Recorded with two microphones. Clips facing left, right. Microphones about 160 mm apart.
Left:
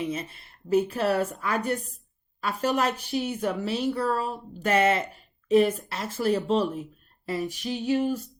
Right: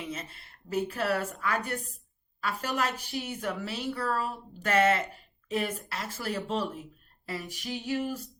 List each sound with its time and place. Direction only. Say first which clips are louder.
0.7 s speech: left 6 dB; 25° left (ahead or behind)